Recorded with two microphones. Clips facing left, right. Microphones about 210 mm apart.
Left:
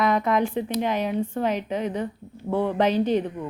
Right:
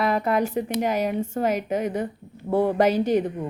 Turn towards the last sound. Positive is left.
turn(degrees=-10)  # may be behind; listen again after turning